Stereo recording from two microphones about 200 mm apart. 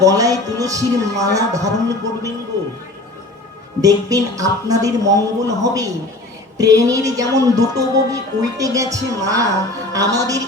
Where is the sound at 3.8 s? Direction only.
15° right (ahead or behind).